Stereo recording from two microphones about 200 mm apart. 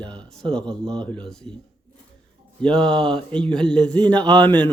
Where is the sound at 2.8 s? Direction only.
25° right (ahead or behind).